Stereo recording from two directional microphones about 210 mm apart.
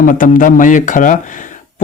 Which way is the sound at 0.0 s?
40° left (ahead or behind).